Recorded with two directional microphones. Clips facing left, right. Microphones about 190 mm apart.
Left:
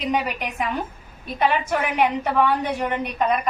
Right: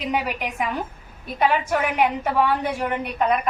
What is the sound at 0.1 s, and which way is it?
A woman's voice, 10° right (ahead or behind).